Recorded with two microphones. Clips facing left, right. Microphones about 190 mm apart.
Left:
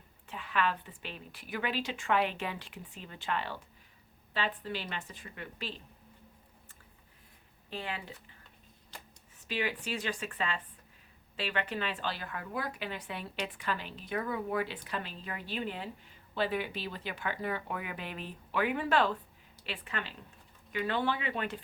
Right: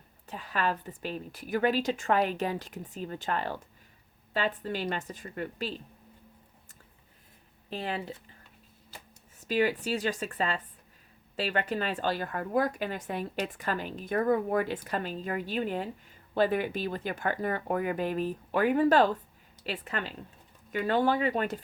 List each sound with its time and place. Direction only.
0.3 s speech: 40° right (ahead or behind)
7.7 s speech: 35° right (ahead or behind)
9.5 s speech: 40° right (ahead or behind)